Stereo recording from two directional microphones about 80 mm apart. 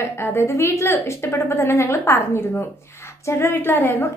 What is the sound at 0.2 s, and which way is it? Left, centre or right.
A woman's voice, left.